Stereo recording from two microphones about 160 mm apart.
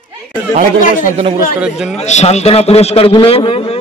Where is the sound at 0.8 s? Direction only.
55° left (ahead or behind).